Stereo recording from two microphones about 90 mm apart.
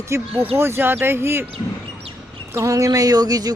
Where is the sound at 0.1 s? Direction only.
30° right (ahead or behind).